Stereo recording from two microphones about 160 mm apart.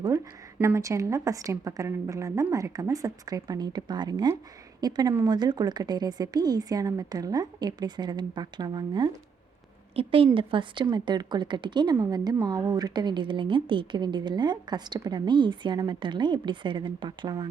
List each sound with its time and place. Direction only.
0.6 s a woman's voice: 20° right (ahead or behind)